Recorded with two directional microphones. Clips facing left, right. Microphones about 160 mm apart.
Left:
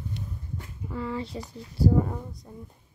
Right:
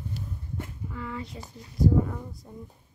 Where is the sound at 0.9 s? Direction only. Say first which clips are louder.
Left 7 dB; 30° left (ahead or behind).